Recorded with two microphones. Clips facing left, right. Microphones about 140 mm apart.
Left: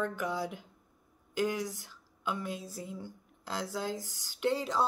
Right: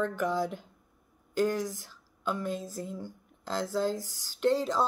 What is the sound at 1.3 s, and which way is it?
Speech, 10° left (ahead or behind).